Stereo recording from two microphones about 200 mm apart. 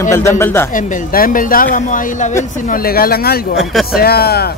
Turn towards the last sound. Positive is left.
turn(degrees=50)  # may be behind; listen again after turning